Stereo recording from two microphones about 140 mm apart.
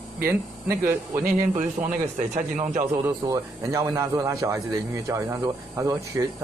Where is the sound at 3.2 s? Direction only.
25° right (ahead or behind).